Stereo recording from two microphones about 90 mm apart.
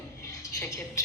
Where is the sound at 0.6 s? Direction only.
35° left (ahead or behind).